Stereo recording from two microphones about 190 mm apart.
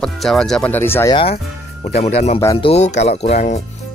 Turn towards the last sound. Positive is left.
turn(degrees=35)  # may be behind; listen again after turning